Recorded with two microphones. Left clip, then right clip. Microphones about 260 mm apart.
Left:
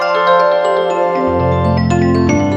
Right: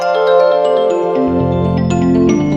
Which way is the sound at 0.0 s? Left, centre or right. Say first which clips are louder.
Even; centre.